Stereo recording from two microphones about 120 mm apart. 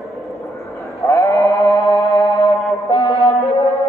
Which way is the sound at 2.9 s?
45° left (ahead or behind).